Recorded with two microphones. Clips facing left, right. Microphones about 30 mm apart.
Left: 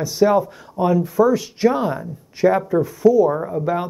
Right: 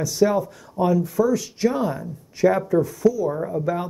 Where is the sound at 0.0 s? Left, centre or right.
Left.